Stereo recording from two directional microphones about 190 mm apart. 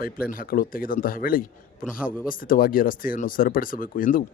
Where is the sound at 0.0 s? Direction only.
50° left (ahead or behind).